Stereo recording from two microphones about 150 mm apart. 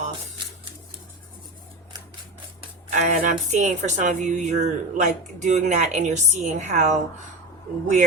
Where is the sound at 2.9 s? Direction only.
55° right (ahead or behind).